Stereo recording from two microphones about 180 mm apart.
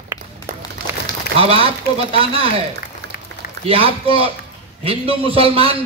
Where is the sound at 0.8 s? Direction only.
60° right (ahead or behind).